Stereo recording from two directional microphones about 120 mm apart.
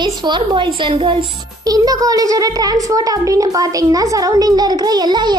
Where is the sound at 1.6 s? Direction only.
30° right (ahead or behind).